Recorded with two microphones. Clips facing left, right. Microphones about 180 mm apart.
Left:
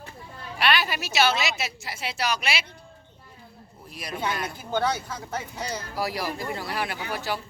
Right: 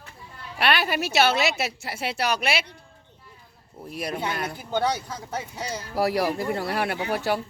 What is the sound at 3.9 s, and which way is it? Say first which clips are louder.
Speech: right 8 dB; 60° right (ahead or behind).